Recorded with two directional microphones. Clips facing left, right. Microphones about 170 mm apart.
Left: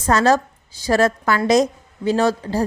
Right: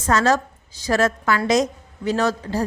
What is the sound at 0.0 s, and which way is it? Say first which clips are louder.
A woman's voice: left 3 dB; 35° left (ahead or behind).